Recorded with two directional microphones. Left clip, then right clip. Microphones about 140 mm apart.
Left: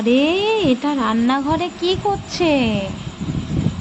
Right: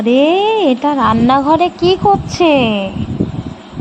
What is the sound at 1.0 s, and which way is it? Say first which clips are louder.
Speech: right 9 dB; 45° right (ahead or behind).